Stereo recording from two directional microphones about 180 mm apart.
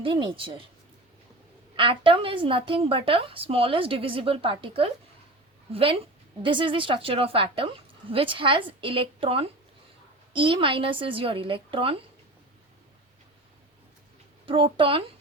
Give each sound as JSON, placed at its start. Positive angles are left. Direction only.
{"t": 0.0, "sound": "a woman's voice", "side_deg": -30}
{"t": 1.7, "sound": "a woman's voice", "side_deg": -30}
{"t": 14.4, "sound": "a woman's voice", "side_deg": -30}